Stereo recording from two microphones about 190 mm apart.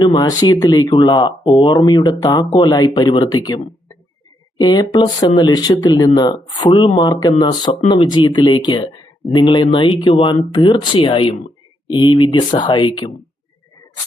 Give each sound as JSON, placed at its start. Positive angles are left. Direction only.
{"t": 0.0, "sound": "speech", "side_deg": 20}
{"t": 4.6, "sound": "speech", "side_deg": 20}